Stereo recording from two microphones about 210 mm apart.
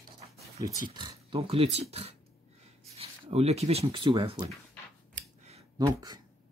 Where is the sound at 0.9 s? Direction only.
20° right (ahead or behind).